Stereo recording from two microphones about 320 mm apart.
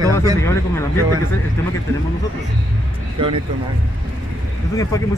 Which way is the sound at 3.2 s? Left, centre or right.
Centre.